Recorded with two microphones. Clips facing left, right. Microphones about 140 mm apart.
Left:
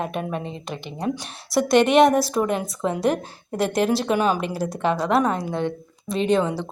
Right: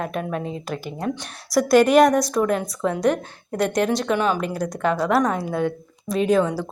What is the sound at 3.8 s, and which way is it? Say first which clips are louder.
Speech: left 1 dB; 30° left (ahead or behind).